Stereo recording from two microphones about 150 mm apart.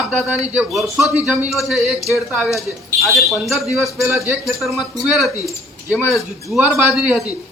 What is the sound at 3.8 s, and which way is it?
Speech, 20° right (ahead or behind).